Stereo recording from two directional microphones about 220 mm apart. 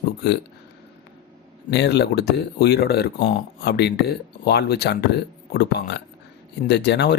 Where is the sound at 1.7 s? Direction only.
50° left (ahead or behind).